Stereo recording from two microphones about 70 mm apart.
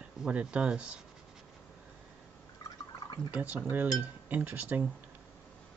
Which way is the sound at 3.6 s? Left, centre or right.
Right.